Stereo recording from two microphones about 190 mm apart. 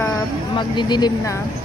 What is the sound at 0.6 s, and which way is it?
Speech, 25° left (ahead or behind).